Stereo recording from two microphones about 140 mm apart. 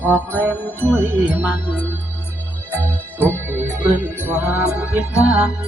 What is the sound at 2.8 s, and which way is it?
Music, 15° left (ahead or behind).